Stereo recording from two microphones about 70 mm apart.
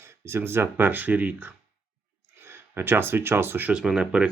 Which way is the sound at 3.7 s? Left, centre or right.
Centre.